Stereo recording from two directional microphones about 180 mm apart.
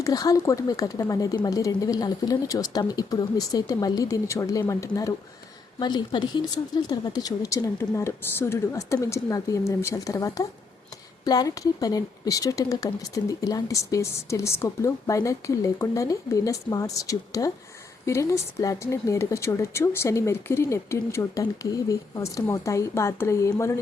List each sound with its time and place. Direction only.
0.0 s speech: 20° left (ahead or behind)